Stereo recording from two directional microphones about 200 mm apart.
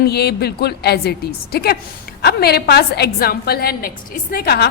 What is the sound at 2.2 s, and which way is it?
A woman's voice, 50° left (ahead or behind).